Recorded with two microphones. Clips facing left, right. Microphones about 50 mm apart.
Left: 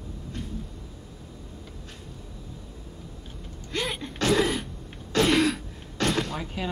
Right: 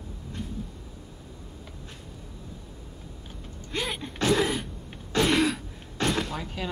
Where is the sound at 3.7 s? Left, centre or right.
Centre.